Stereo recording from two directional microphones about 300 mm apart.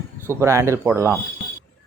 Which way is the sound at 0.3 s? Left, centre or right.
Centre.